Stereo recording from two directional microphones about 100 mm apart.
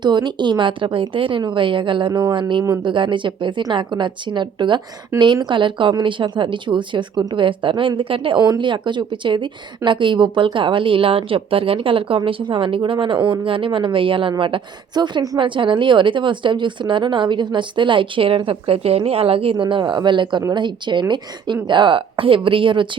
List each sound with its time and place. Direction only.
0.0 s a woman's voice: 50° right (ahead or behind)
8.4 s a woman's voice: 50° right (ahead or behind)
15.4 s a woman's voice: 55° right (ahead or behind)